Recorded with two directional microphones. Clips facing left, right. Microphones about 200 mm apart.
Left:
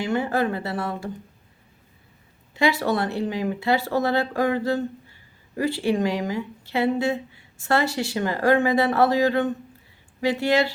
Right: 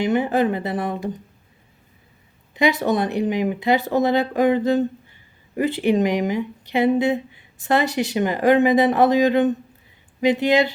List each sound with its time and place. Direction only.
0.0 s speech: 20° right (ahead or behind)
2.6 s speech: 20° right (ahead or behind)